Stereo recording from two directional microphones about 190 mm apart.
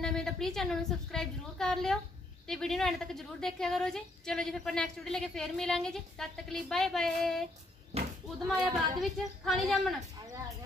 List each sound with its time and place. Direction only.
0.0 s a woman's voice: centre (ahead or behind)
7.9 s slam: 30° right (ahead or behind)
8.4 s speech: 20° right (ahead or behind)
9.0 s a woman's voice: centre (ahead or behind)